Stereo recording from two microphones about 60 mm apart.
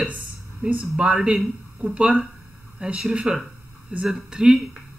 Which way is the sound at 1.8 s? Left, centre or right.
Centre.